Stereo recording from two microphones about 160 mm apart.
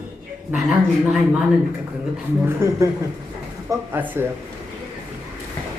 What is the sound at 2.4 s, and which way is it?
Speech, 15° right (ahead or behind).